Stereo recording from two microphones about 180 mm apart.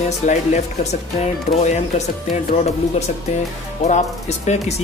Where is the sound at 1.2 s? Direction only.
40° left (ahead or behind).